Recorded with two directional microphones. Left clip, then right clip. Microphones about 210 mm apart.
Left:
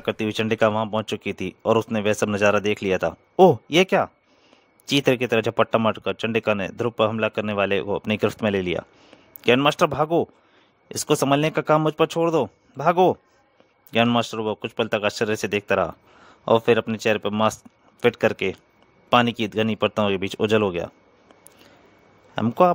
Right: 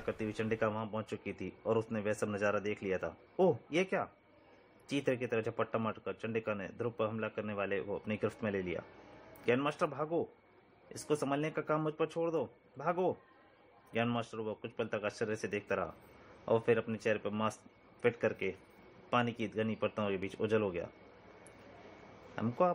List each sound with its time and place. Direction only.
0.0 s speech: 45° left (ahead or behind)
22.3 s speech: 50° left (ahead or behind)